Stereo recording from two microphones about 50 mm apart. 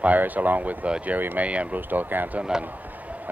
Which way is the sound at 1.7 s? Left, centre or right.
Right.